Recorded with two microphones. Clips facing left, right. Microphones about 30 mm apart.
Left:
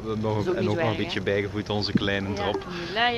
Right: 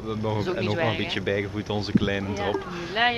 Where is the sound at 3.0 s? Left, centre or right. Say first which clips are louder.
Right 1 dB; centre.